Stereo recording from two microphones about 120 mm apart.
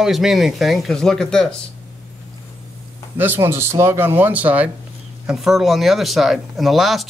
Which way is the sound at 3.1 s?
15° right (ahead or behind).